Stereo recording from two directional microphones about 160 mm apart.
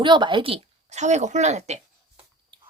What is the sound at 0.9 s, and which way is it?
Speech, 45° right (ahead or behind).